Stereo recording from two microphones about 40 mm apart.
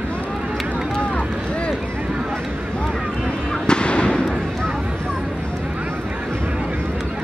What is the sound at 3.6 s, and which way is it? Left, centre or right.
Fireworks, left.